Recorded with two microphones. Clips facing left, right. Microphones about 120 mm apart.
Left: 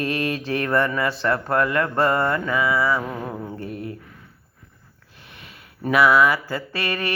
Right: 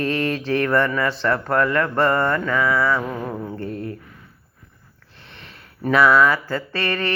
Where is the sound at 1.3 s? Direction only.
30° left (ahead or behind).